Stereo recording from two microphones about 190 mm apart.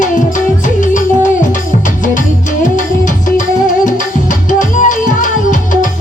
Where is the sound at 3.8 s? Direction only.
45° left (ahead or behind).